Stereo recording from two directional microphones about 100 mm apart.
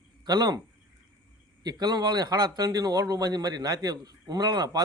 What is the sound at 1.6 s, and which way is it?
A man's voice, 40° right (ahead or behind).